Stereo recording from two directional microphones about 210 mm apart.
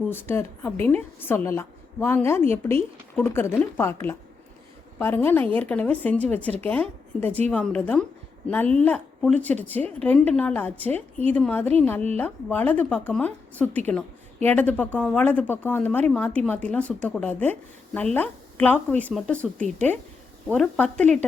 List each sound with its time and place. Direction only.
0.1 s a woman's voice: 10° left (ahead or behind)
7.3 s speech: 30° right (ahead or behind)
7.5 s a woman's voice: 5° left (ahead or behind)